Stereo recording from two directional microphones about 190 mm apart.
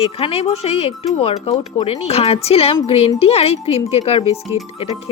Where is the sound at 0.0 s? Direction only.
30° left (ahead or behind).